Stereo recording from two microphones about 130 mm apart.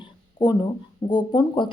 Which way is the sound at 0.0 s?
35° left (ahead or behind).